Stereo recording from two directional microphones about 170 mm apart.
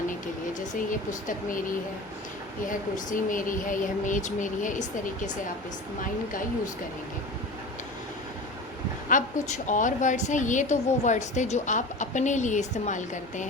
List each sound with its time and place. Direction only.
0.6 s a woman's voice: 50° left (ahead or behind)
2.6 s a woman's voice: 50° left (ahead or behind)
9.0 s a woman's voice: 50° left (ahead or behind)